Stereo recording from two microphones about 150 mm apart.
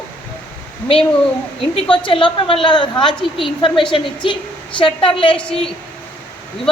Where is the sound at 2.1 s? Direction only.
35° left (ahead or behind).